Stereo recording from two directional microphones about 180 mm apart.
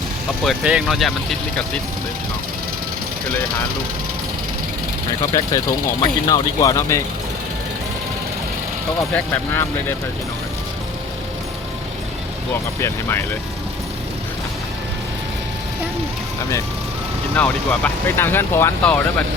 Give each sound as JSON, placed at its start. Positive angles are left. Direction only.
{"t": 0.4, "sound": "speech", "side_deg": -5}
{"t": 5.3, "sound": "speech", "side_deg": 20}
{"t": 9.1, "sound": "speech", "side_deg": 10}
{"t": 12.8, "sound": "speech", "side_deg": 15}
{"t": 17.3, "sound": "speech", "side_deg": 5}